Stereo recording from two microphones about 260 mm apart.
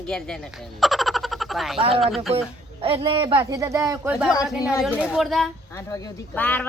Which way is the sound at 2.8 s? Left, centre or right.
Right.